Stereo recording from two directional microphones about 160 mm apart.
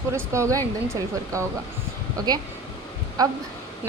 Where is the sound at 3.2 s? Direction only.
25° right (ahead or behind).